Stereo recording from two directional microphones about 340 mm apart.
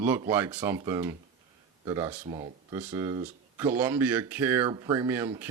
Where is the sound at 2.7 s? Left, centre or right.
Centre.